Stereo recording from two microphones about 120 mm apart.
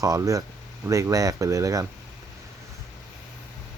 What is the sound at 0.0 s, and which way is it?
Speech, 25° right (ahead or behind).